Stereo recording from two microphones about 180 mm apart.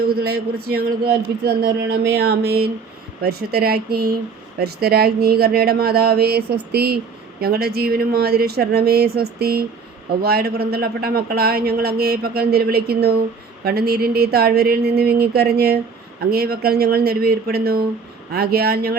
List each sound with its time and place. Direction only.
0.0 s speech: 60° right (ahead or behind)